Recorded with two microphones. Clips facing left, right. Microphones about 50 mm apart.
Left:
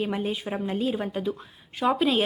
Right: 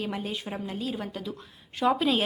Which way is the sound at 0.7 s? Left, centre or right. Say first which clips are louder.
Left 7 dB; left.